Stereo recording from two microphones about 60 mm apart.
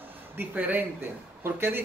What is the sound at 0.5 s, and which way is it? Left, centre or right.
Speech, right.